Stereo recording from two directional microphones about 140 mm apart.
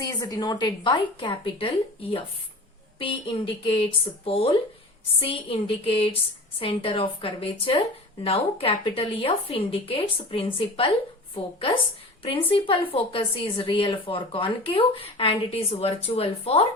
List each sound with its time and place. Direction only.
0.2 s a woman's voice: 30° left (ahead or behind)
12.2 s a woman's voice: 40° left (ahead or behind)